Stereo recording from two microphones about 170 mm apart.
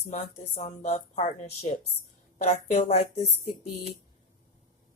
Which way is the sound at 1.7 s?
30° left (ahead or behind).